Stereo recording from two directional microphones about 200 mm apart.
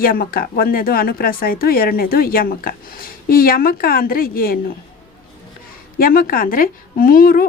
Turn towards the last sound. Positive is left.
turn(degrees=45)  # may be behind; listen again after turning